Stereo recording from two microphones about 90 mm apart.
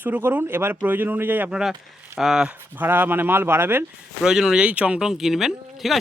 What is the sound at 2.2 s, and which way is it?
Speech, 5° right (ahead or behind).